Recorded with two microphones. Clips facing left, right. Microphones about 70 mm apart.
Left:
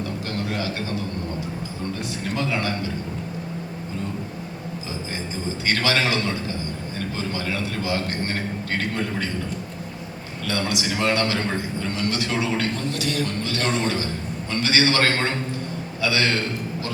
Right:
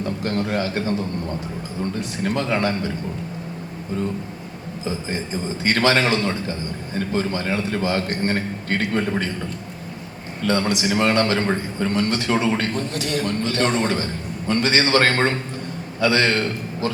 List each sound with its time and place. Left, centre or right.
0.3 s a man's voice: right
2.3 s a man's voice: right
5.6 s a man's voice: right
10.4 s a man's voice: right